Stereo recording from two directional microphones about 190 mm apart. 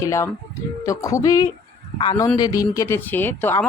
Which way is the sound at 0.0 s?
15° left (ahead or behind).